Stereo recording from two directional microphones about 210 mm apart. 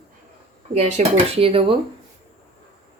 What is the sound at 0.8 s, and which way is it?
Speech, 30° right (ahead or behind).